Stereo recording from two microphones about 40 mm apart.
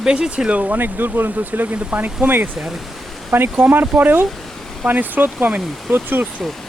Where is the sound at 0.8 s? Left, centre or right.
Right.